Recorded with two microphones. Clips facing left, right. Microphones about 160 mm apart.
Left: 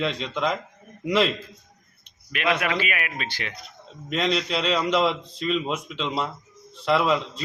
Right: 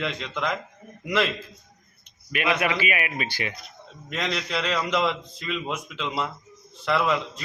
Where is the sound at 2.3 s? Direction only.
5° right (ahead or behind).